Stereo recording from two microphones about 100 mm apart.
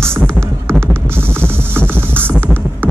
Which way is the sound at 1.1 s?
25° right (ahead or behind).